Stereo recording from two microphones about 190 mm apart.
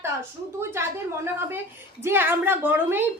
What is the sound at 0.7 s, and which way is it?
A woman's voice, 10° right (ahead or behind).